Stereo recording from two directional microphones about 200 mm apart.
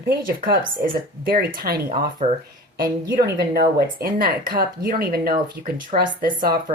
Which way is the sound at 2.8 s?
50° right (ahead or behind).